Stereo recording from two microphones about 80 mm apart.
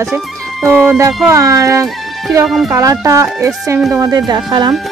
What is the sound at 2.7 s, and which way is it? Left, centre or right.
Speech, right.